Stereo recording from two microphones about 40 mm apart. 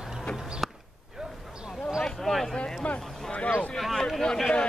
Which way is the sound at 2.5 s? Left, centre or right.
Left.